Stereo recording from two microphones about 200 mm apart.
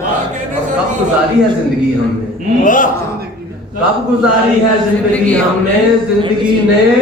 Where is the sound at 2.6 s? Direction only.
40° left (ahead or behind).